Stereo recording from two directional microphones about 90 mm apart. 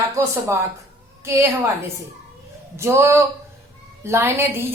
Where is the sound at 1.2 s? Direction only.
30° right (ahead or behind).